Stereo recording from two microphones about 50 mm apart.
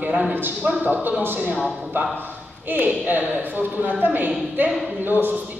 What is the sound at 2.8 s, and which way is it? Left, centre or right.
Speech, right.